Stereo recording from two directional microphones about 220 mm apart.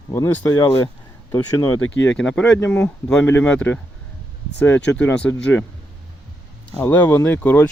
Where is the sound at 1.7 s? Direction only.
70° left (ahead or behind).